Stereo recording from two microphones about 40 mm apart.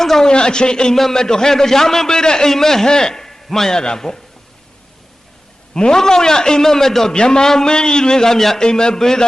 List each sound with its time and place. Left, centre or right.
0.0 s a man's voice: centre
0.3 s a man's voice: left
0.9 s a man's voice: centre
5.7 s a man's voice: centre